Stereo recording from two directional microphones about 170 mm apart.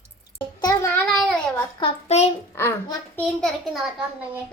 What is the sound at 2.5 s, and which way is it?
Speech, 15° left (ahead or behind).